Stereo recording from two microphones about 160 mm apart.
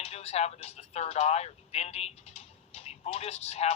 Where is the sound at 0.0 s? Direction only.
40° left (ahead or behind).